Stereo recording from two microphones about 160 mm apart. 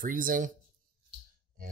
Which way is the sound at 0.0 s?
60° right (ahead or behind).